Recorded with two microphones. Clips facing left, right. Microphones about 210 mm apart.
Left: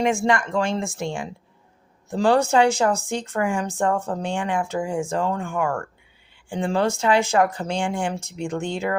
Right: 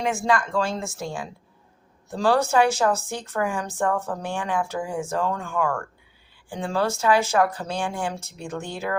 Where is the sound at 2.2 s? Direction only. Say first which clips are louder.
Left 2 dB; 20° left (ahead or behind).